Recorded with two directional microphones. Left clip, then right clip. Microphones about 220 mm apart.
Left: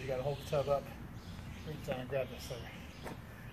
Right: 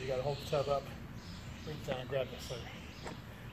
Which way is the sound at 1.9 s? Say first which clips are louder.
Right 1 dB; 5° right (ahead or behind).